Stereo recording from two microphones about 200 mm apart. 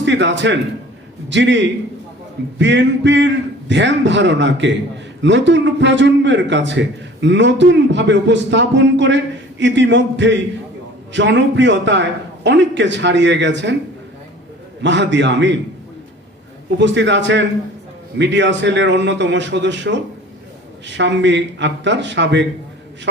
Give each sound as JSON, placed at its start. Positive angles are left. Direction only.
{"t": 0.0, "sound": "a man's voice", "side_deg": -60}
{"t": 14.8, "sound": "a man's voice", "side_deg": -60}
{"t": 16.7, "sound": "a man's voice", "side_deg": -65}